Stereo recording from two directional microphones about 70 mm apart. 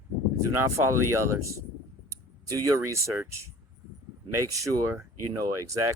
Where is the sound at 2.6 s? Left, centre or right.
Right.